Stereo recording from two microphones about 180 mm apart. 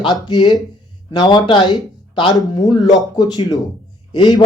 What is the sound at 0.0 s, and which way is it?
Speech, 25° left (ahead or behind).